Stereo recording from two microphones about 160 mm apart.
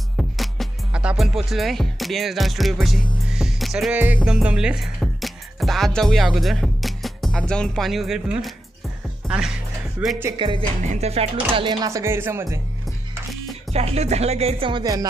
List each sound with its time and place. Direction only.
0.2 s music: centre (ahead or behind)
4.2 s speech: 5° right (ahead or behind)
9.2 s music: 5° left (ahead or behind)
10.0 s speech: 10° right (ahead or behind)
10.4 s speech: 30° right (ahead or behind)
10.9 s speech: 40° right (ahead or behind); by 12.5 s 15° right (ahead or behind)
13.7 s music: 40° right (ahead or behind); by 15.0 s 25° right (ahead or behind)